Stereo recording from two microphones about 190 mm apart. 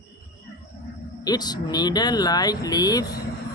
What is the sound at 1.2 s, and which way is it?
Speech, 20° left (ahead or behind).